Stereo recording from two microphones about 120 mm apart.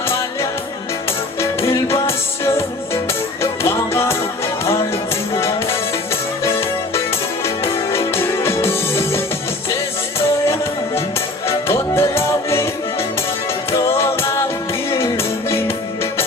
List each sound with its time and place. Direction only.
1.4 s music: 25° left (ahead or behind)
6.4 s music: 20° left (ahead or behind)
13.7 s music: 20° left (ahead or behind)